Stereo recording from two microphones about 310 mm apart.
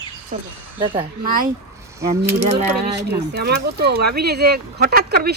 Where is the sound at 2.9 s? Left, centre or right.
Right.